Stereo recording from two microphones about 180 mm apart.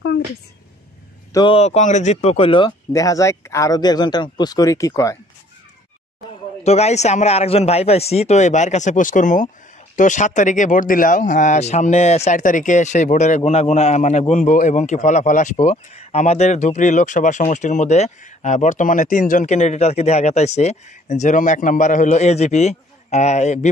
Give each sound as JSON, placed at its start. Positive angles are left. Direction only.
{"t": 1.3, "sound": "speech", "side_deg": 30}
{"t": 2.9, "sound": "speech", "side_deg": 20}
{"t": 6.6, "sound": "speech", "side_deg": 35}